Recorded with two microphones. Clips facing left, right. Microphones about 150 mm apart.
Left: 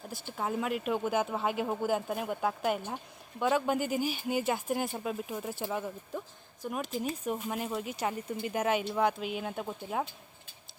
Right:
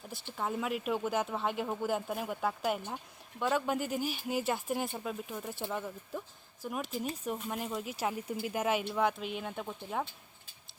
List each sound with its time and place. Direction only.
0.1 s speech: centre (ahead or behind)